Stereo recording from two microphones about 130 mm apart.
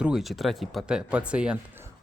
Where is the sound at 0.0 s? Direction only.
5° right (ahead or behind).